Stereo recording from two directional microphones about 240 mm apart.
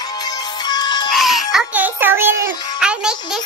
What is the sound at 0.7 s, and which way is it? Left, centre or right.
Music, centre.